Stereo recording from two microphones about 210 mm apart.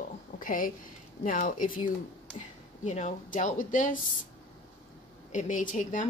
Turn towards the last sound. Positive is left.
turn(degrees=35)  # may be behind; listen again after turning